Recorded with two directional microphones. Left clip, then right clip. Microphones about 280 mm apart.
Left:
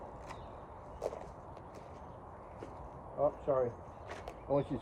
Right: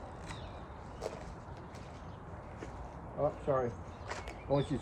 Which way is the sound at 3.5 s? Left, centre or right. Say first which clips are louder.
Even; centre.